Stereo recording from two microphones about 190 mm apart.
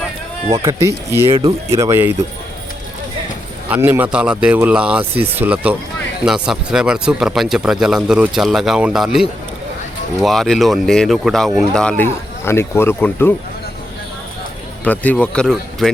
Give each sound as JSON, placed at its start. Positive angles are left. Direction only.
{"t": 0.6, "sound": "speech", "side_deg": -15}
{"t": 1.3, "sound": "speech", "side_deg": -30}
{"t": 1.7, "sound": "speech", "side_deg": -15}
{"t": 3.7, "sound": "speech", "side_deg": -10}
{"t": 14.8, "sound": "speech", "side_deg": 5}